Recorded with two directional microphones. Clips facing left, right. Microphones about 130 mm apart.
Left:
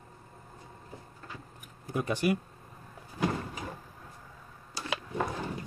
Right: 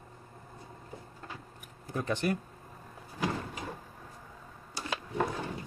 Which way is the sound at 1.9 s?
10° left (ahead or behind).